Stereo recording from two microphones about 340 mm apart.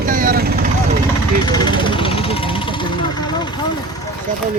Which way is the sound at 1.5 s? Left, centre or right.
Centre.